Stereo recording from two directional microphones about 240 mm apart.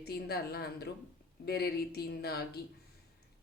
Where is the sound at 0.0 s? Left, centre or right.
Left.